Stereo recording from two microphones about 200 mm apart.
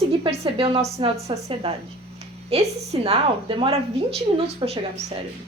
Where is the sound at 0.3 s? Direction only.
30° right (ahead or behind).